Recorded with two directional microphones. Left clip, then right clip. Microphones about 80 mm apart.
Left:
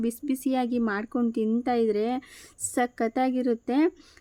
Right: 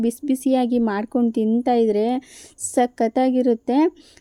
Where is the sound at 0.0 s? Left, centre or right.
Right.